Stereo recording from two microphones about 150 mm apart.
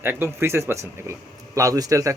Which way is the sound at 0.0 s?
15° right (ahead or behind).